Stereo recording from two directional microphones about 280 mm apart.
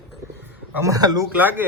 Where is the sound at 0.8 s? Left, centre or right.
Centre.